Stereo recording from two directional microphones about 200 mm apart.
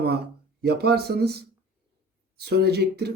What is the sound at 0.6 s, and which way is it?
Speech, 55° right (ahead or behind).